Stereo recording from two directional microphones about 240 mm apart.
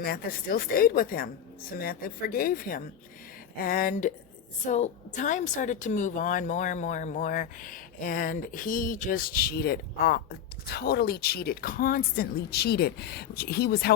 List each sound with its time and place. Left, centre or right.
0.0 s a woman's voice: left